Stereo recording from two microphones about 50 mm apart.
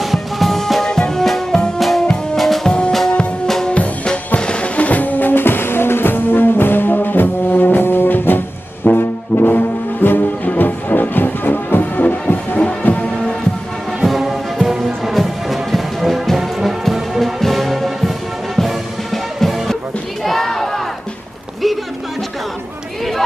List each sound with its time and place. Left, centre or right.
0.0 s music: centre
2.6 s music: centre; by 8.4 s left
9.0 s brass instrument: left
12.8 s music: left
14.0 s music: centre
20.2 s crowd: centre